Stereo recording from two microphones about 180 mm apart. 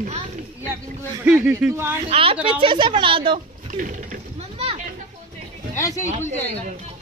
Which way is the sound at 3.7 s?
45° right (ahead or behind).